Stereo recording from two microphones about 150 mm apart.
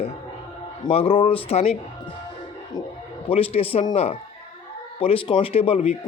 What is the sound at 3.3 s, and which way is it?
Speech, 40° left (ahead or behind).